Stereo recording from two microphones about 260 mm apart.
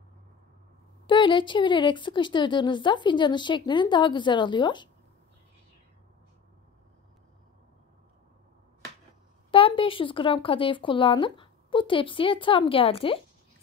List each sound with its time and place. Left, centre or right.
1.0 s speech: centre
9.5 s speech: centre